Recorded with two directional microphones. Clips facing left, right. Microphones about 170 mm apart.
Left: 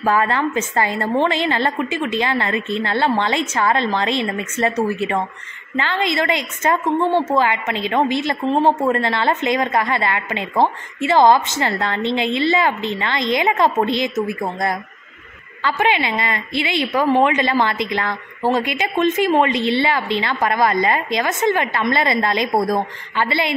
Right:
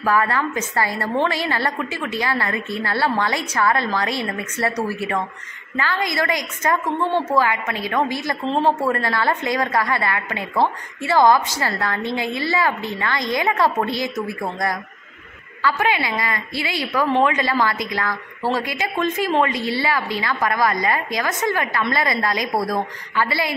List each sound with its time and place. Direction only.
0.0 s a woman's voice: 25° left (ahead or behind)